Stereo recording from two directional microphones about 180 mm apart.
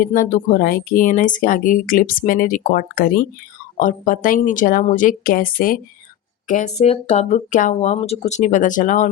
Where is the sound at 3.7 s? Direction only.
45° left (ahead or behind).